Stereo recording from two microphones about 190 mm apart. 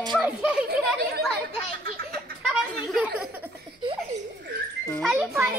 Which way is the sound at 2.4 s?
Centre (ahead or behind).